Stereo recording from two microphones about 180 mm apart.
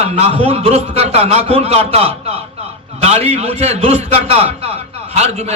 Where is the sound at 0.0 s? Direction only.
35° right (ahead or behind).